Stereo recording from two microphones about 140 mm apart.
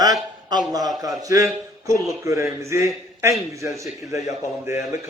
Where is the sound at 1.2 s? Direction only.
25° right (ahead or behind).